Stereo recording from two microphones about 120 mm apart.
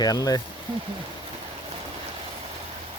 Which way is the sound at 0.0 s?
30° left (ahead or behind).